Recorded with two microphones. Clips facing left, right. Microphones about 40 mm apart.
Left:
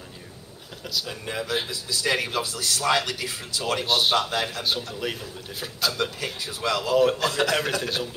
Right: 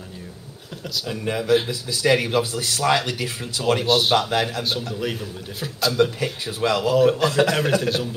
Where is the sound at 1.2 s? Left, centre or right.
Centre.